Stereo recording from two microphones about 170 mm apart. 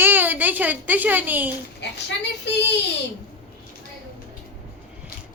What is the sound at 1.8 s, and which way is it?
Speech, 90° left.